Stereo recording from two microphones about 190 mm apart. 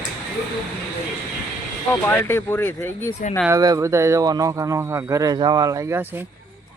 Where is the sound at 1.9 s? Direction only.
10° left (ahead or behind).